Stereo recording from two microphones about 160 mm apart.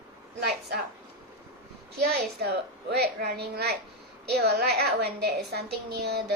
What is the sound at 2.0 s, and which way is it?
A woman's voice, 90° right.